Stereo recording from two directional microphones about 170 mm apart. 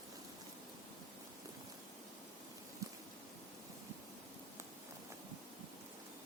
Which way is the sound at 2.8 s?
20° right (ahead or behind).